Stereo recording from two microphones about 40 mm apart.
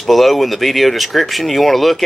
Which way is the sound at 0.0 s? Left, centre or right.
Centre.